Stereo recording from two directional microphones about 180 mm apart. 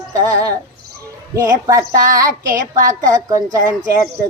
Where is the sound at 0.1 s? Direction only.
20° right (ahead or behind).